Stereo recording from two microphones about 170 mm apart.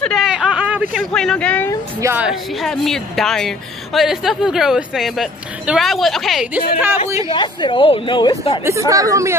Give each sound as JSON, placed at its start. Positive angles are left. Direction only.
{"t": 0.0, "sound": "a sound", "side_deg": 0}
{"t": 0.9, "sound": "a woman's voice", "side_deg": 5}
{"t": 2.0, "sound": "a woman's voice", "side_deg": -15}
{"t": 2.2, "sound": "a woman's voice", "side_deg": 0}
{"t": 7.3, "sound": "speech", "side_deg": 30}
{"t": 8.6, "sound": "speech", "side_deg": -20}